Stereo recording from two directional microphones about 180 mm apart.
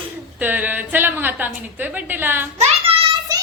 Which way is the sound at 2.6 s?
35° right (ahead or behind).